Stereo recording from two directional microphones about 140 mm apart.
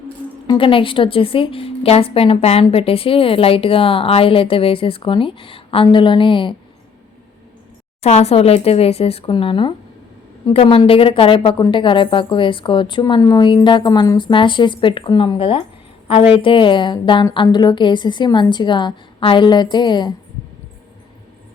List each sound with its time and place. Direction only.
0.4 s a woman's voice: 35° left (ahead or behind)
8.0 s a woman's voice: 50° left (ahead or behind); by 20.1 s 30° left (ahead or behind)